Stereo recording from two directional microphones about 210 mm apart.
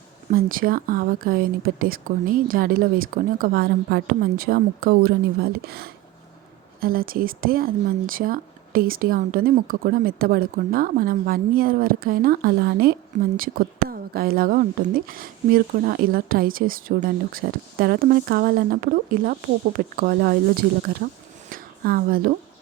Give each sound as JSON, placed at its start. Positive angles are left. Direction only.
{"t": 0.3, "sound": "speech", "side_deg": -40}